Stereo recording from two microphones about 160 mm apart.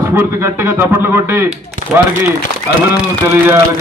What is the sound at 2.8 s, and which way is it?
Speech, 15° right (ahead or behind).